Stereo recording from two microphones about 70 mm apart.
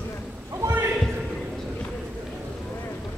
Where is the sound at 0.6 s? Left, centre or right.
Right.